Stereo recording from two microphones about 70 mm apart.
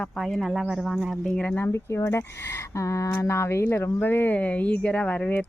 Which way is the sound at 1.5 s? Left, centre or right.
Left.